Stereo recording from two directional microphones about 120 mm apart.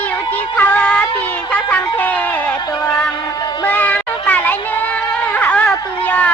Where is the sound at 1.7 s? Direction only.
15° left (ahead or behind).